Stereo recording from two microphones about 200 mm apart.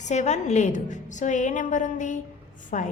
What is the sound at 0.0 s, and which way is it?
A woman's voice, 35° left (ahead or behind).